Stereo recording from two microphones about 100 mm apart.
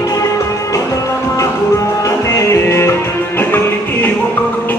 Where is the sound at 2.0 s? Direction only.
30° left (ahead or behind).